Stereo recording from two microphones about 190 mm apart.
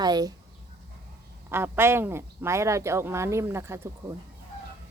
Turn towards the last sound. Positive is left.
turn(degrees=-15)  # may be behind; listen again after turning